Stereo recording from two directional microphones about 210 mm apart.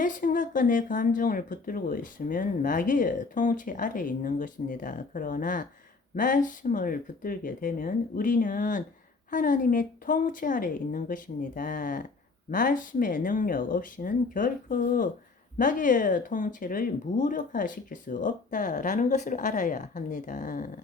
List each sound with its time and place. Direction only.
0.0 s speech: 40° left (ahead or behind)